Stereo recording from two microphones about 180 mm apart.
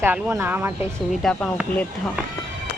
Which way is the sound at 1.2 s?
5° left (ahead or behind).